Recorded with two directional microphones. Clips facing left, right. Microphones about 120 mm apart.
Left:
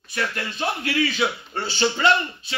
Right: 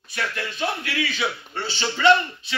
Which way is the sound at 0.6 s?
40° left (ahead or behind).